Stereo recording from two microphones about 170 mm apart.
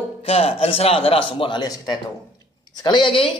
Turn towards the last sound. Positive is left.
turn(degrees=30)  # may be behind; listen again after turning